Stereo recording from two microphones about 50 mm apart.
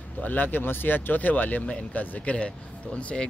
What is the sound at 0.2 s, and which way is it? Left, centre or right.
Speech, left.